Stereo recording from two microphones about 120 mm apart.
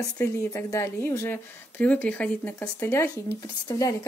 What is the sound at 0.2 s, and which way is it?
Speech, 25° left (ahead or behind).